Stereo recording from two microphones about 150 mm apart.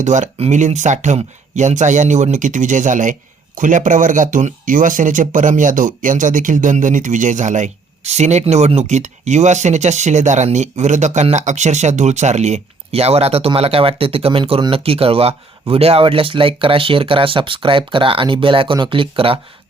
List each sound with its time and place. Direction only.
0.0 s speech: 55° right (ahead or behind); by 19.4 s 35° right (ahead or behind)